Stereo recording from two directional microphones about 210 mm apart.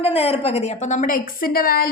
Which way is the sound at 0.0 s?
25° left (ahead or behind).